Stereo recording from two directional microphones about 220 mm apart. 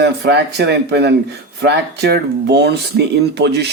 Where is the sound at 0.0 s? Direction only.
50° right (ahead or behind).